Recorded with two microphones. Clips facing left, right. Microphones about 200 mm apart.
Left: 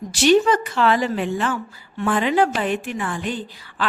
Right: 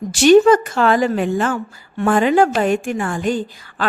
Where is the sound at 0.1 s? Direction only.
50° right (ahead or behind).